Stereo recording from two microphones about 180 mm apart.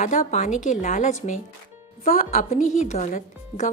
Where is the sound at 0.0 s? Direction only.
45° left (ahead or behind).